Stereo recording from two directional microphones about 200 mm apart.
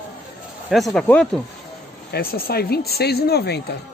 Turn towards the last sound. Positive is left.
turn(degrees=55)  # may be behind; listen again after turning